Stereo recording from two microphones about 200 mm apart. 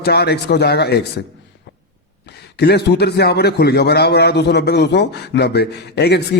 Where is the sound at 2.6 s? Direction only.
55° left (ahead or behind).